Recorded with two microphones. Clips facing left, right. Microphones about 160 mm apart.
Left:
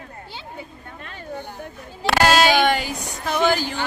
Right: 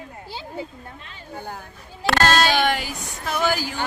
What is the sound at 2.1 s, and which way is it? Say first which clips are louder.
Speech: left 3 dB; 10° left (ahead or behind).